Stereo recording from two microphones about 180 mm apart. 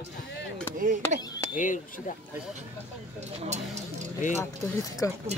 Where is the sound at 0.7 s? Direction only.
50° right (ahead or behind).